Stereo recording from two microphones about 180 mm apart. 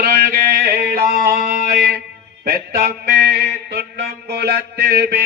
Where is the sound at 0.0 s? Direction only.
55° right (ahead or behind).